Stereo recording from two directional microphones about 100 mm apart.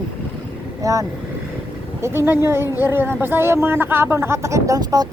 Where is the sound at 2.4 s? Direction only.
25° right (ahead or behind).